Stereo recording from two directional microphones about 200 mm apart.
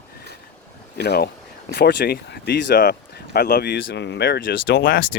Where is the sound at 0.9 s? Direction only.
55° left (ahead or behind).